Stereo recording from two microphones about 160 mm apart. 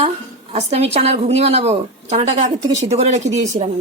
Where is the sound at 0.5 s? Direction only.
40° right (ahead or behind).